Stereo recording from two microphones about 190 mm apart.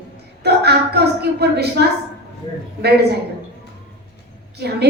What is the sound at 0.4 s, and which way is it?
A woman's voice, 60° right (ahead or behind).